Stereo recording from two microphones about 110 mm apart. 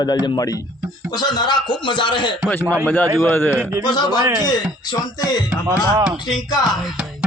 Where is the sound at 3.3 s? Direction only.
20° left (ahead or behind).